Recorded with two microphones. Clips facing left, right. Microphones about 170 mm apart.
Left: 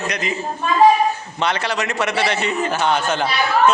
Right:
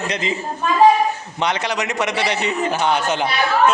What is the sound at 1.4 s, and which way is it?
A man's voice, 15° right (ahead or behind).